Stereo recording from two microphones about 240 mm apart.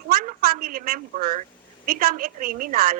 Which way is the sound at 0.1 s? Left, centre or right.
Right.